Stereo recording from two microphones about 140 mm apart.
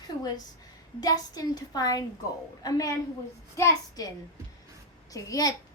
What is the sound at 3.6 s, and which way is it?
A woman's voice, 25° left (ahead or behind).